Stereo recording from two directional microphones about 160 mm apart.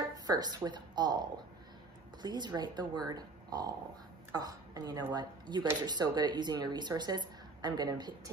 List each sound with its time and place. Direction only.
0.3 s a woman's voice: 25° right (ahead or behind)